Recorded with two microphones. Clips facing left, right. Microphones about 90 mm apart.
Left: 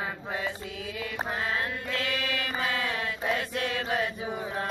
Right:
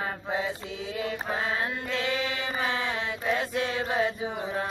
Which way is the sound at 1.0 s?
25° right (ahead or behind).